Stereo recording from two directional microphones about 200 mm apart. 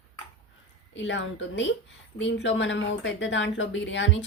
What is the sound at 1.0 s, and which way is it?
Speech, 65° left (ahead or behind).